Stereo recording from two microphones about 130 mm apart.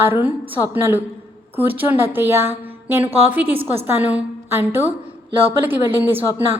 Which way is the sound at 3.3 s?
15° right (ahead or behind).